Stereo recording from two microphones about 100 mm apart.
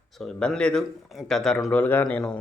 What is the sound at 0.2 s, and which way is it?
A man's voice, 10° left (ahead or behind).